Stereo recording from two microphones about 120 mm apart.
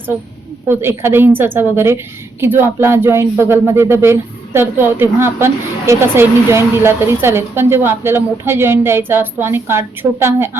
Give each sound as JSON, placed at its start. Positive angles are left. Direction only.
{"t": 0.7, "sound": "speech", "side_deg": -20}